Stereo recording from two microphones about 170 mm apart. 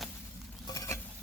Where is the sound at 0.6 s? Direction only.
20° left (ahead or behind).